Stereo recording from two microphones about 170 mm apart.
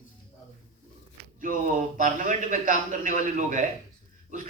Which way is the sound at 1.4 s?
50° right (ahead or behind).